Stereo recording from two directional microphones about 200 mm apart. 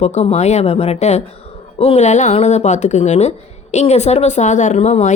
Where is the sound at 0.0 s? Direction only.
35° left (ahead or behind).